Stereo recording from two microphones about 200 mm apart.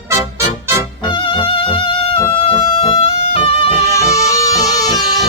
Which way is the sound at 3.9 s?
15° left (ahead or behind).